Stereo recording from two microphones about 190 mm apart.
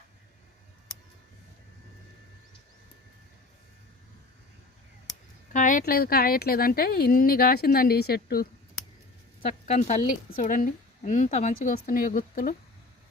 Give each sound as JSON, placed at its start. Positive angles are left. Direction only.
{"t": 5.5, "sound": "speech", "side_deg": 45}
{"t": 9.6, "sound": "speech", "side_deg": 40}